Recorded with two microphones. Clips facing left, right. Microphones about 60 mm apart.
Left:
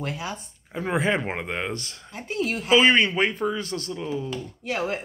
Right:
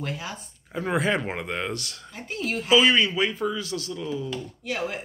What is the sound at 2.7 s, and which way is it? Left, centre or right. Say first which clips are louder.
Speech: left 1 dB; left.